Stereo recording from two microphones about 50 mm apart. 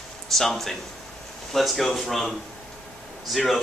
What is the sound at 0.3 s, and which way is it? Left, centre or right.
Speech, centre.